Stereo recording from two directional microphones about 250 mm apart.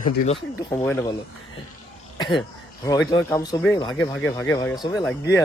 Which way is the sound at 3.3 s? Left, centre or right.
Centre.